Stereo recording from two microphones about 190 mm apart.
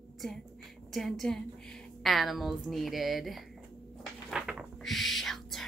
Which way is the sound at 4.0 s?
5° right (ahead or behind).